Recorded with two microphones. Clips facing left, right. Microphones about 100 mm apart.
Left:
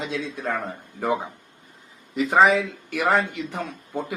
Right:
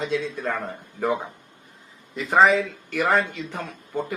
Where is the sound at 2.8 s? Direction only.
15° left (ahead or behind).